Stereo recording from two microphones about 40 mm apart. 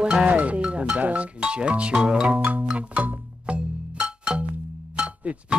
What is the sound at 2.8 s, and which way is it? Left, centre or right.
Music, right.